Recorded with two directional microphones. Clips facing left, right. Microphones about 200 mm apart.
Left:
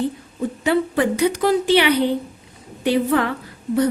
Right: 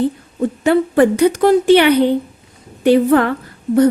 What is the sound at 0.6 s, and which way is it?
A woman's voice, 50° right (ahead or behind).